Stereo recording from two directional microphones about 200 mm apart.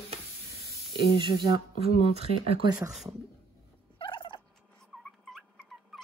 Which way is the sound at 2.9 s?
Centre (ahead or behind).